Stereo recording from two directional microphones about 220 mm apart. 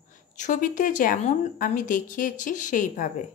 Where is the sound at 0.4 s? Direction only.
35° left (ahead or behind).